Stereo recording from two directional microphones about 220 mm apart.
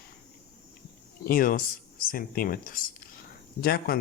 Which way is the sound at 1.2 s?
40° left (ahead or behind).